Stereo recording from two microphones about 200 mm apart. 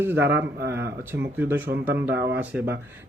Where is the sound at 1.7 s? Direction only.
40° right (ahead or behind).